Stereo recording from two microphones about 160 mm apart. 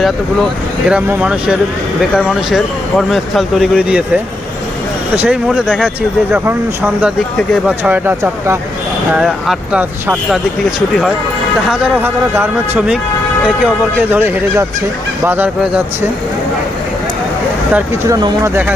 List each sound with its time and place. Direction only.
0.9 s speech: 5° right (ahead or behind)
9.1 s speech: 5° right (ahead or behind)
11.7 s speech: 10° right (ahead or behind)
14.1 s speech: 10° right (ahead or behind)
17.7 s speech: 15° right (ahead or behind)